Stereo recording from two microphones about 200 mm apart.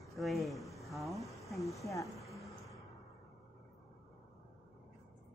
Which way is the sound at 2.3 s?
15° left (ahead or behind).